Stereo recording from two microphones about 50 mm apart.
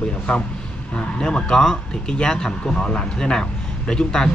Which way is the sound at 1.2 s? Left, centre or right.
Centre.